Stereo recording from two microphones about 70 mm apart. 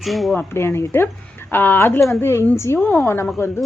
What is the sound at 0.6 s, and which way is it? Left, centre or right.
Speech, left.